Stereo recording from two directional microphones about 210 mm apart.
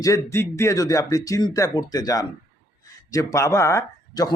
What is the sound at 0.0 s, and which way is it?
Speech, 15° left (ahead or behind).